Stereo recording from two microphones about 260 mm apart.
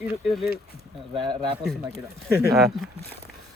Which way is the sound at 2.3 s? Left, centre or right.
Centre.